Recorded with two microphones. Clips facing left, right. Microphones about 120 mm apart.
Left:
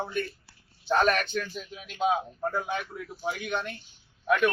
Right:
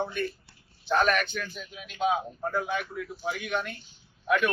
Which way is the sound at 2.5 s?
30° left (ahead or behind).